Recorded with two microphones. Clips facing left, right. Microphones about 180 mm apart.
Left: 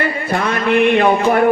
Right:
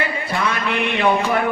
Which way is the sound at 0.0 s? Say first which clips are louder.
Left 4 dB; 50° left (ahead or behind).